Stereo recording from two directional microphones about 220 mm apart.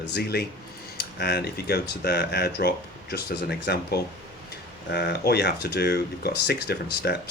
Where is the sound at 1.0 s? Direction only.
50° left (ahead or behind).